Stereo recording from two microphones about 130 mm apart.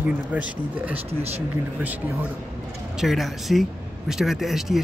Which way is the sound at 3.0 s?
Centre (ahead or behind).